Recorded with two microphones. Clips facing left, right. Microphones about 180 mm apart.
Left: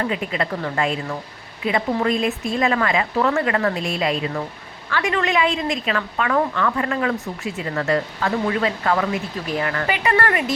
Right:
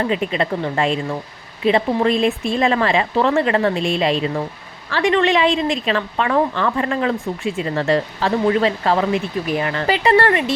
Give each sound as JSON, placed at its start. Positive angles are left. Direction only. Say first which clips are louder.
{"t": 0.1, "sound": "a woman's voice", "louder": "right 4 dB", "side_deg": -25}